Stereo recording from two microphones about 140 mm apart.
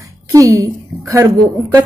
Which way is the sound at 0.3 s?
25° right (ahead or behind).